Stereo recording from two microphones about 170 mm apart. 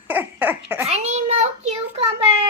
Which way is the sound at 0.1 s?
10° right (ahead or behind).